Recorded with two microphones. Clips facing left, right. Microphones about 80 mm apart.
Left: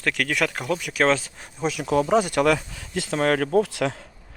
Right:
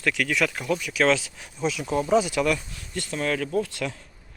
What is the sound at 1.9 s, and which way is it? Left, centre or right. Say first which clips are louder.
Speech: left 3 dB; left.